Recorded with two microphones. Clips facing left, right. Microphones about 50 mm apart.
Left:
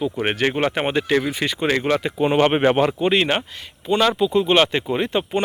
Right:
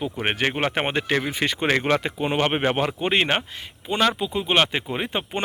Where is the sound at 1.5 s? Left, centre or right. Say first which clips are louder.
Even; right.